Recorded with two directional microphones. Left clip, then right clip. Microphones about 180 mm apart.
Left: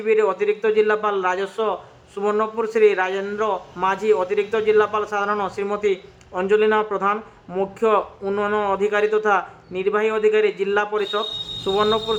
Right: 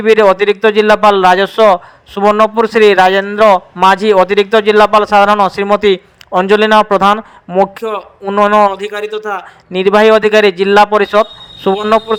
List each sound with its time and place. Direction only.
0.0 s a man's voice: 45° right (ahead or behind)
7.5 s speech: 40° right (ahead or behind)
8.9 s speech: centre (ahead or behind)
9.7 s a man's voice: 45° right (ahead or behind)